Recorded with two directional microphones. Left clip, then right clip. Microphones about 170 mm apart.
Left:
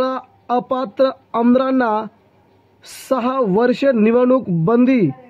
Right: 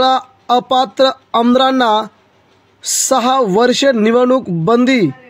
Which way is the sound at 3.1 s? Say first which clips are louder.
Right 5 dB; 35° right (ahead or behind).